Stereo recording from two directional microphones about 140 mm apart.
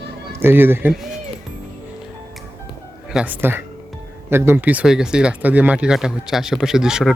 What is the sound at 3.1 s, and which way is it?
Speech, 10° right (ahead or behind).